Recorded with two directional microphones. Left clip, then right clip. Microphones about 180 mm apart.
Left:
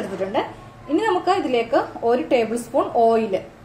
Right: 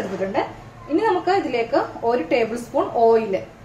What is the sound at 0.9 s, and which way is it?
A woman's voice, 30° left (ahead or behind).